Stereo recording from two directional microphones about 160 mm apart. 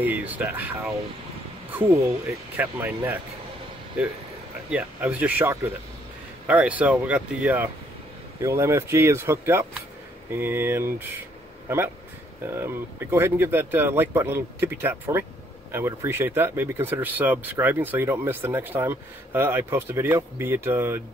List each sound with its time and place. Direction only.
0.0 s speech: 10° right (ahead or behind)
4.6 s speech: 10° right (ahead or behind)
12.4 s speech: 15° right (ahead or behind)